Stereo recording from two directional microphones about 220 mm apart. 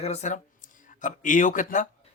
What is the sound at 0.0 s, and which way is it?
Speech, 30° left (ahead or behind).